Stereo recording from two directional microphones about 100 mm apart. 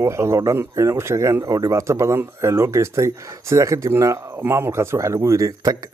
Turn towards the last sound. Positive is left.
turn(degrees=-35)  # may be behind; listen again after turning